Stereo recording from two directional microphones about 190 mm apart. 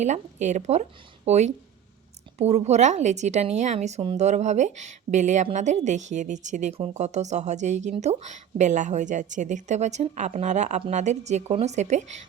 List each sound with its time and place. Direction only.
0.0 s speech: 40° right (ahead or behind)